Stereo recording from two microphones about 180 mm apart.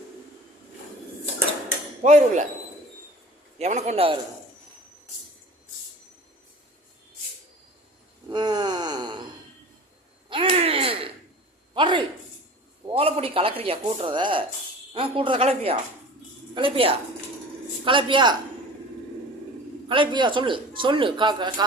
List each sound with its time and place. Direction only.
2.0 s a man's voice: 40° right (ahead or behind)
3.6 s a man's voice: 40° right (ahead or behind)
8.3 s wail: 25° right (ahead or behind)
10.2 s a sound: 30° right (ahead or behind)
12.9 s a man's voice: 30° right (ahead or behind)
19.9 s a man's voice: 25° right (ahead or behind)